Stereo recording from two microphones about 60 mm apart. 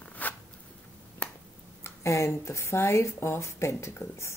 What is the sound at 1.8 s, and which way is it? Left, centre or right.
Speech, left.